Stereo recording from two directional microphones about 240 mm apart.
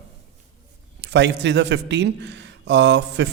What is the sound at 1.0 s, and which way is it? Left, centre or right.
Speech, right.